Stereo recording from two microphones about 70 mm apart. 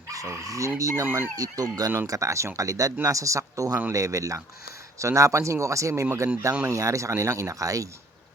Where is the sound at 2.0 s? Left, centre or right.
Right.